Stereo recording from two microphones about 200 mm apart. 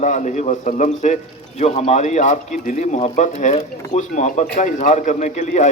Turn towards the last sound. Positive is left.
turn(degrees=35)  # may be behind; listen again after turning